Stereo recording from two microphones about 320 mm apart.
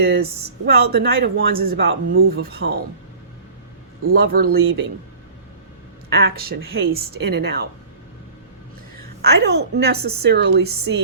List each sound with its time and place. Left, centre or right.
0.0 s speech: right
4.0 s speech: right
6.1 s speech: right
9.4 s speech: right